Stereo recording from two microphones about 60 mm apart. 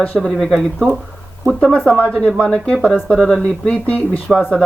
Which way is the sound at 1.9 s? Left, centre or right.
Centre.